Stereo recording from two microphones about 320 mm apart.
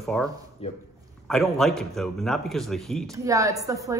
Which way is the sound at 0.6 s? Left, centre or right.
Centre.